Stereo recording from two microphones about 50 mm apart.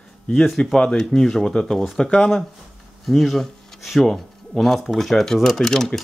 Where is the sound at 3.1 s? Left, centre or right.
Centre.